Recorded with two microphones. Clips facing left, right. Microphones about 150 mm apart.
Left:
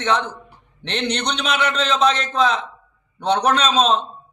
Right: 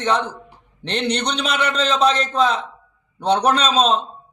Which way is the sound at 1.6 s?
35° right (ahead or behind).